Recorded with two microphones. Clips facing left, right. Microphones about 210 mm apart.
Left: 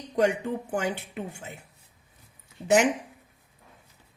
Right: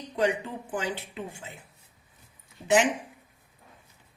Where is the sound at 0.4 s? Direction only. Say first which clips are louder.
Left 4 dB; 45° left (ahead or behind).